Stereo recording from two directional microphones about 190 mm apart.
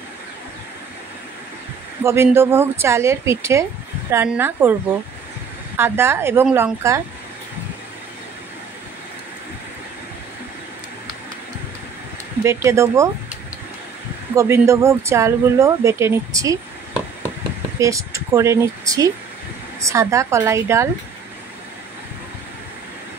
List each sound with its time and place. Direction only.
2.0 s speech: 15° right (ahead or behind)
5.8 s speech: 10° right (ahead or behind)
12.4 s speech: 15° right (ahead or behind)
14.3 s speech: 15° right (ahead or behind)